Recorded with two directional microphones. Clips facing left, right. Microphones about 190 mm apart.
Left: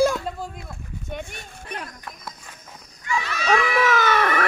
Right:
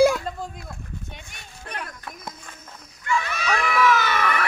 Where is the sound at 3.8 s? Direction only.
50° left (ahead or behind).